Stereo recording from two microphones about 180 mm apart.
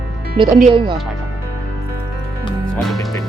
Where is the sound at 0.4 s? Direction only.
30° right (ahead or behind).